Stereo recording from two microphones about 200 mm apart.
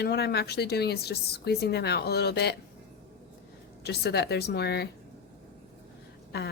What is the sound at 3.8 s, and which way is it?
Speech, 55° left (ahead or behind).